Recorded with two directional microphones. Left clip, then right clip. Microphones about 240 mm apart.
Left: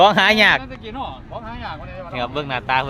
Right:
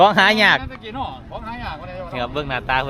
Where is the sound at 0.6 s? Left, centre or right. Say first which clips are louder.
Right 1 dB; centre.